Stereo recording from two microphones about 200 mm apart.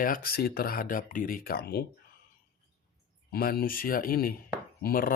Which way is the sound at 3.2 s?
50° left (ahead or behind).